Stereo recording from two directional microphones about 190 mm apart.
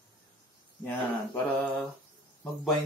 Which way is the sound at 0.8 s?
10° left (ahead or behind).